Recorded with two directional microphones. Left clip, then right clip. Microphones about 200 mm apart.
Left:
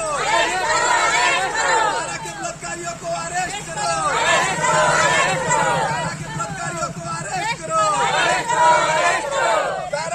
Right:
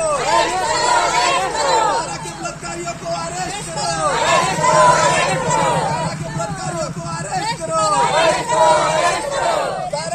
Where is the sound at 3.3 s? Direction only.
10° left (ahead or behind).